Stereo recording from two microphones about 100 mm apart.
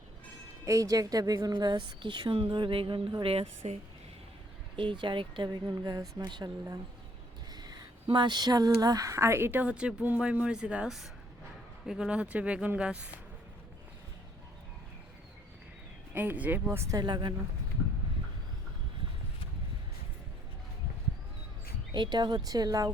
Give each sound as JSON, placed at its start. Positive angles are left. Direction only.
{"t": 0.6, "sound": "a woman's voice", "side_deg": -35}
{"t": 3.2, "sound": "a woman's voice", "side_deg": -90}
{"t": 4.8, "sound": "a woman's voice", "side_deg": -55}
{"t": 7.5, "sound": "a sound", "side_deg": -45}
{"t": 8.1, "sound": "speech", "side_deg": -50}
{"t": 16.1, "sound": "speech", "side_deg": -20}
{"t": 17.0, "sound": "a woman's voice", "side_deg": -50}
{"t": 21.9, "sound": "a woman's voice", "side_deg": -50}